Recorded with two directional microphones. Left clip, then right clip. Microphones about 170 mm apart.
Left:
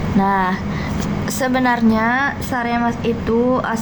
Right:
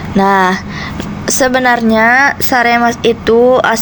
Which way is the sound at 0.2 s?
40° right (ahead or behind).